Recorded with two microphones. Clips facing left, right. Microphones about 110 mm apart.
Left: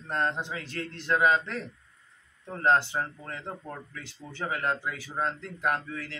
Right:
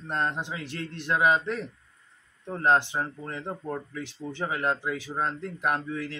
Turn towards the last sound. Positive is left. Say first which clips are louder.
# right 2 dB
turn(degrees=-20)  # may be behind; listen again after turning